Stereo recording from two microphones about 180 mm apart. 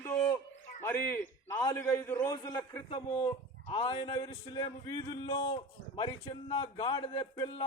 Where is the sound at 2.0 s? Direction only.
15° left (ahead or behind).